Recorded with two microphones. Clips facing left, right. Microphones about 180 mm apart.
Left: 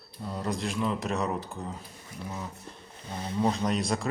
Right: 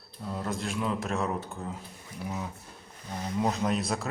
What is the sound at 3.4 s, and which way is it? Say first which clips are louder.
Speech: left 2 dB; 5° right (ahead or behind).